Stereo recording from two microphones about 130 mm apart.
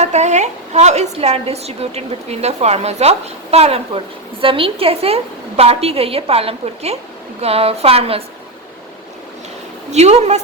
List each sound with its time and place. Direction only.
0.0 s a woman's voice: 60° right (ahead or behind)
9.9 s a woman's voice: 55° right (ahead or behind)